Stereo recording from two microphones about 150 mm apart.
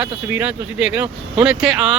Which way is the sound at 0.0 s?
10° right (ahead or behind).